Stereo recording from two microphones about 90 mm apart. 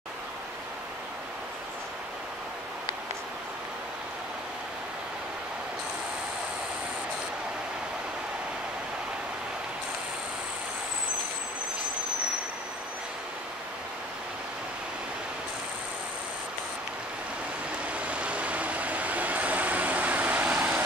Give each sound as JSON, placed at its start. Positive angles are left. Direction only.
{"t": 17.9, "sound": "vehicle", "side_deg": -15}